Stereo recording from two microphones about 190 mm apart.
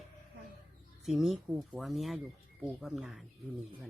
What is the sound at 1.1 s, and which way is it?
Speech, centre (ahead or behind).